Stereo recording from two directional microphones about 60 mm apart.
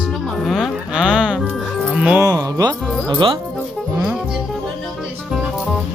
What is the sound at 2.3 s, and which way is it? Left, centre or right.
Speech, right.